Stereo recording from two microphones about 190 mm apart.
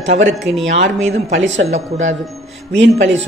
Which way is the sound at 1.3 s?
75° right (ahead or behind).